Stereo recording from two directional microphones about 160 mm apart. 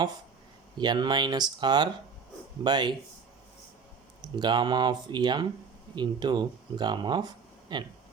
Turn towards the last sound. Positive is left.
turn(degrees=-25)  # may be behind; listen again after turning